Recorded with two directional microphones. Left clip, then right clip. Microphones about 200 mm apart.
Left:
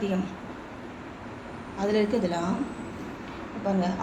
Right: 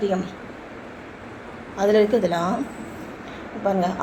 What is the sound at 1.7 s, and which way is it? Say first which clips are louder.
Speech: right 8 dB; 25° right (ahead or behind).